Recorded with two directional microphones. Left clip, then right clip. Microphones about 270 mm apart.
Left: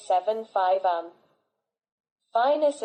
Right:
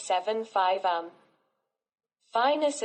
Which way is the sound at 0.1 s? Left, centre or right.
Right.